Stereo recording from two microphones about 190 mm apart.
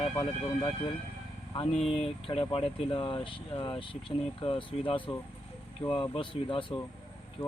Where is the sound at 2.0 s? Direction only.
30° left (ahead or behind).